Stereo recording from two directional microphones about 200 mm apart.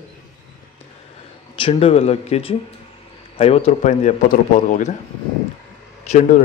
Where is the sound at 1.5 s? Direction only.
25° left (ahead or behind).